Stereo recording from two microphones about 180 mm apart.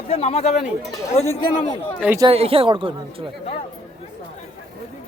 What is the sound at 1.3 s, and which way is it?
Speech, 35° left (ahead or behind).